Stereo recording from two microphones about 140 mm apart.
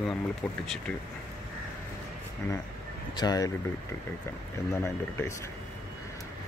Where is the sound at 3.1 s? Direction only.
30° left (ahead or behind).